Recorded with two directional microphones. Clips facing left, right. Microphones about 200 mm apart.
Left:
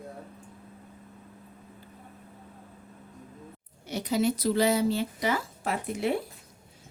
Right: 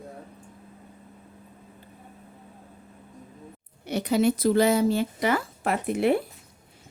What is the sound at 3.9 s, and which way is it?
Speech, 60° right (ahead or behind).